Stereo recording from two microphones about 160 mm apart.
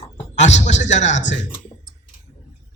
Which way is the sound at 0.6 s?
50° left (ahead or behind).